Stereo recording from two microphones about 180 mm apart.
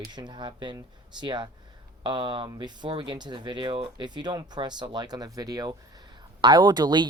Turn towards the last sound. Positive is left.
turn(degrees=-25)  # may be behind; listen again after turning